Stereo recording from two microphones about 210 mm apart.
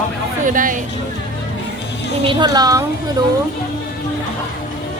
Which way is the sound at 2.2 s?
20° right (ahead or behind).